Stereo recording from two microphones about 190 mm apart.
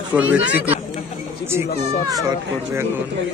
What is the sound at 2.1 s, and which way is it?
Speech, 20° right (ahead or behind).